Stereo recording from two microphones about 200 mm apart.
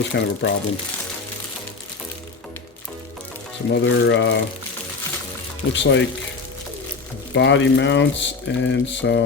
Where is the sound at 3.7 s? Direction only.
65° left (ahead or behind).